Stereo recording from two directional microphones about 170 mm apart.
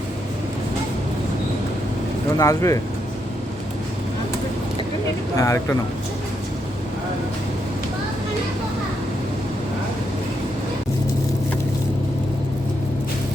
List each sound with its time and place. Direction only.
2.4 s speech: 20° left (ahead or behind)
5.4 s speech: 20° left (ahead or behind)